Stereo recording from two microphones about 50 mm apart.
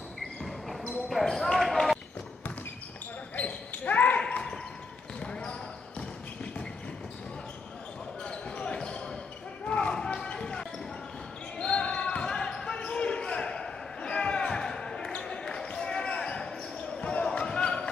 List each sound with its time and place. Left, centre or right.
0.4 s basketball bounce: centre
3.3 s basketball bounce: left
5.2 s basketball bounce: centre
8.2 s basketball bounce: centre